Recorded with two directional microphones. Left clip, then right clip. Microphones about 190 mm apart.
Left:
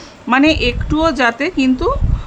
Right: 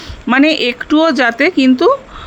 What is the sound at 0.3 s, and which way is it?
Speech, 25° right (ahead or behind).